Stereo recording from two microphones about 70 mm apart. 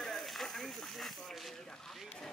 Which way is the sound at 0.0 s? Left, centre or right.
Centre.